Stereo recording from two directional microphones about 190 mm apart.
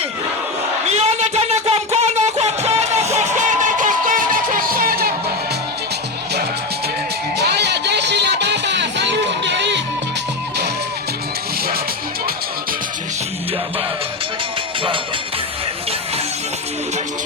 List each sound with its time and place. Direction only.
0.9 s music: 35° right (ahead or behind)
7.3 s music: 60° right (ahead or behind)